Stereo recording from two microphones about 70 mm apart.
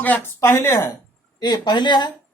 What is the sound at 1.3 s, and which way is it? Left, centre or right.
Speech, left.